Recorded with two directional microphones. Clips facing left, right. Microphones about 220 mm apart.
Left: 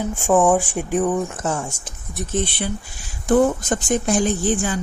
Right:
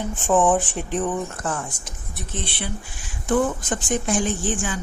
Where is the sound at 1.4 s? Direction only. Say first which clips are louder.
Left 4 dB; 25° left (ahead or behind).